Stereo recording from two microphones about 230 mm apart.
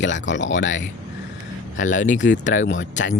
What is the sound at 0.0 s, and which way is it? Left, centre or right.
Speech, left.